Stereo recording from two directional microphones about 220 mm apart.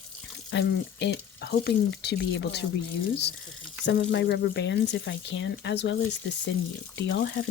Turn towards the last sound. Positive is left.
turn(degrees=55)  # may be behind; listen again after turning